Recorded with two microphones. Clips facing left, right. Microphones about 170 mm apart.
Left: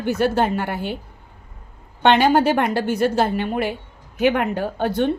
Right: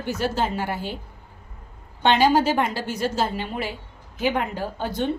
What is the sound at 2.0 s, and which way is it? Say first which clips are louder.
Speech: left 3 dB; 60° left (ahead or behind).